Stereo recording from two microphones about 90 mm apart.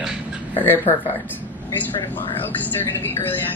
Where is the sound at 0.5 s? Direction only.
25° left (ahead or behind).